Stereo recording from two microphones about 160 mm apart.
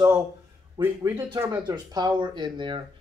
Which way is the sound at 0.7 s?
15° right (ahead or behind).